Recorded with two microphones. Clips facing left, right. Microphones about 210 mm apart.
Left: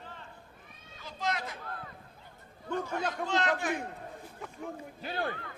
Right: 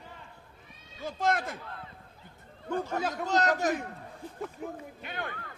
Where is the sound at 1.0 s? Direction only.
50° right (ahead or behind).